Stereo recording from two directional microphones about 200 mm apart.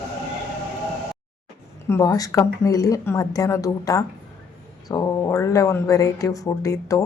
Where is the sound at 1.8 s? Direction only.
15° left (ahead or behind).